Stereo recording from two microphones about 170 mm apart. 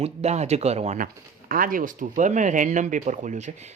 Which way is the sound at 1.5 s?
55° right (ahead or behind).